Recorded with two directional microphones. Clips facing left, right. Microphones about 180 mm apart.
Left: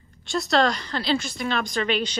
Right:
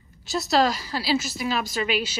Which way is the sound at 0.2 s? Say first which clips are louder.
Even; 5° right (ahead or behind).